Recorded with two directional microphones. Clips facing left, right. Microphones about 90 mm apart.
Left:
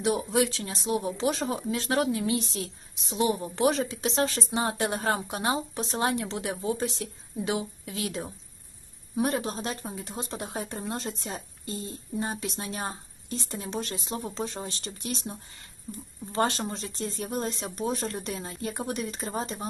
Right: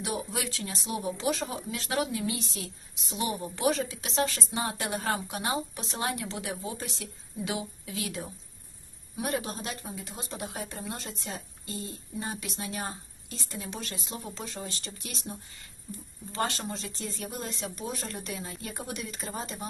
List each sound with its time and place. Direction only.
0.0 s speech: 30° left (ahead or behind)
16.3 s speech: 30° left (ahead or behind)